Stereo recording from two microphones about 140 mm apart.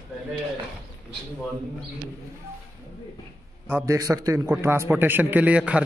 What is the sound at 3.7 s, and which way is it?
A man's voice, 25° right (ahead or behind).